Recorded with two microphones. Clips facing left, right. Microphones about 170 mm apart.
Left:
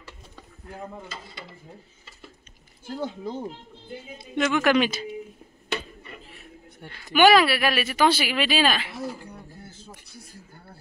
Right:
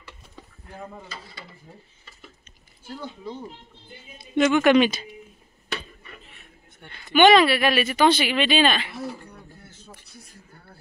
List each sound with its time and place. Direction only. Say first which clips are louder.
2.9 s speech: left 4 dB; 45° left (ahead or behind)
4.4 s a woman's voice: right 4 dB; centre (ahead or behind)
6.8 s a woman's voice: right 1 dB; 5° left (ahead or behind)